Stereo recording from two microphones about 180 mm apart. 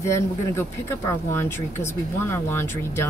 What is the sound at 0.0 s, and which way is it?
Speech, 15° left (ahead or behind).